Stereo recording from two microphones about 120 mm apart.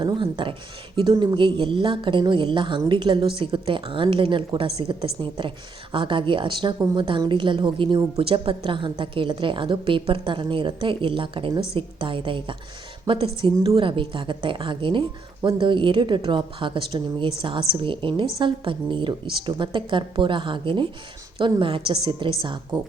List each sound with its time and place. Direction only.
0.0 s a woman's voice: 40° right (ahead or behind)